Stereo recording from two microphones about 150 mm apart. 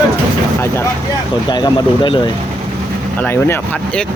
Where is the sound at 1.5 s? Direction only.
30° left (ahead or behind).